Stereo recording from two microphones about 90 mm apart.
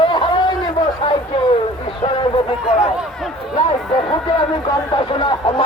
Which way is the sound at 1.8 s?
70° left (ahead or behind).